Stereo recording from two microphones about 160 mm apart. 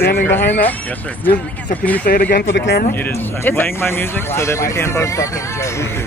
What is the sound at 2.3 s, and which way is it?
Speech, 85° left.